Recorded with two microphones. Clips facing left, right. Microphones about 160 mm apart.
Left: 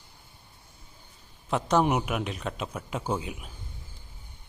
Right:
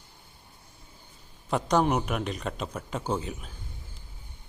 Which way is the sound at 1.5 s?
Centre (ahead or behind).